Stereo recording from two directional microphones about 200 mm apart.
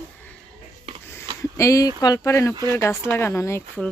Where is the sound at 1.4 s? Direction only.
15° left (ahead or behind).